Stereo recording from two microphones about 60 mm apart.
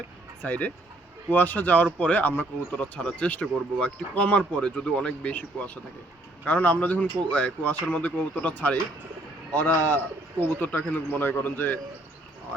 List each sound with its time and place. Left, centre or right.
0.4 s a man's voice: left
2.7 s a man's voice: centre